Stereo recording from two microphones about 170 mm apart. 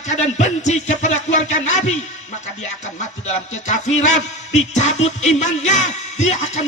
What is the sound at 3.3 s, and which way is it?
Music, 40° left (ahead or behind).